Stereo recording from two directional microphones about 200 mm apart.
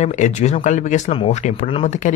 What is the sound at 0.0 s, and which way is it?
Speech, 35° left (ahead or behind).